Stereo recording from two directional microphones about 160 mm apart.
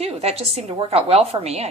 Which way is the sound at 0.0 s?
40° right (ahead or behind).